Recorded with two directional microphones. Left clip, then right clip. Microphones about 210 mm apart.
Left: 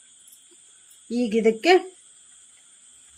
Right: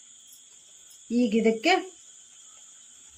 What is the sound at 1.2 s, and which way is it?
Speech, 55° left (ahead or behind).